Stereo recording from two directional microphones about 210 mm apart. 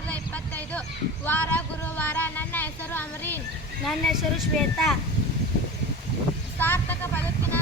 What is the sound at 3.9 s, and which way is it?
Speech, centre (ahead or behind).